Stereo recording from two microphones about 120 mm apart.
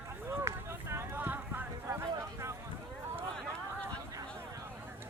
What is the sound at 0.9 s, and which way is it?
Clip-clop, 20° right (ahead or behind).